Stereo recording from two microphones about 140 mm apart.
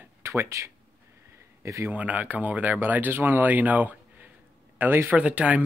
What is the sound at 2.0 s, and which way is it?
Speech, 10° right (ahead or behind).